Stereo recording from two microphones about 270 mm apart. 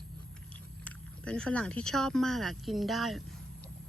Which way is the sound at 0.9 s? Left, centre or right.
Centre.